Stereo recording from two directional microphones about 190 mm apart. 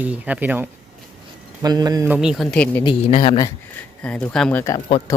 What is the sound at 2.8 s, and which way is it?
Speech, 30° left (ahead or behind).